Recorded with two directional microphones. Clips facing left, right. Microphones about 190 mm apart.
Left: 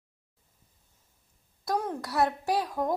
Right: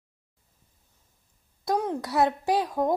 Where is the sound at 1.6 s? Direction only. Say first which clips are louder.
Right 4 dB; 20° right (ahead or behind).